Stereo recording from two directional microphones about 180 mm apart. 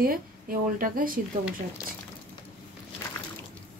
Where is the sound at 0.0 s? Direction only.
55° right (ahead or behind).